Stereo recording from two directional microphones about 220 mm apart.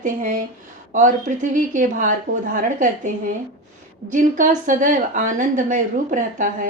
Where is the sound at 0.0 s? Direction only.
35° right (ahead or behind).